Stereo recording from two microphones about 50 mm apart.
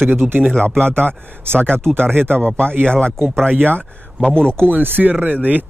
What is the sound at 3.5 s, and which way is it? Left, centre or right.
Speech, right.